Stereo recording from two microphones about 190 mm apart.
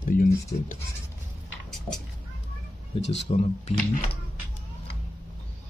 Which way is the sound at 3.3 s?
30° left (ahead or behind).